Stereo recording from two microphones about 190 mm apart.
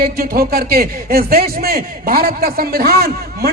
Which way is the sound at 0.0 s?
50° right (ahead or behind).